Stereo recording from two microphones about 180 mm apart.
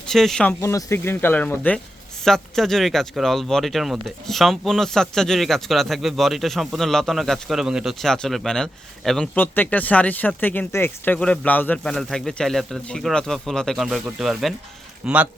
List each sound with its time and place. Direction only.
0.0 s speech: centre (ahead or behind)
0.6 s speech: 15° left (ahead or behind); by 15.3 s 5° right (ahead or behind)